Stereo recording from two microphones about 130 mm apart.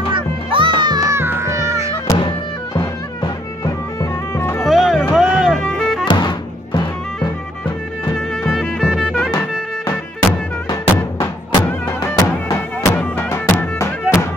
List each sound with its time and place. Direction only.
0.1 s music: 40° right (ahead or behind); by 1.9 s 20° right (ahead or behind)
2.0 s music: 35° left (ahead or behind)
4.6 s music: centre (ahead or behind)
5.6 s music: 5° left (ahead or behind)
6.0 s music: 35° left (ahead or behind)
8.5 s music: centre (ahead or behind)
12.1 s music: 20° left (ahead or behind)